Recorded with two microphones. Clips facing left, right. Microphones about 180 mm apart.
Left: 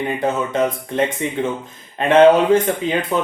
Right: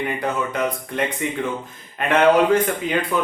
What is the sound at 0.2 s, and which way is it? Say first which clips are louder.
Speech: left 4 dB; 25° left (ahead or behind).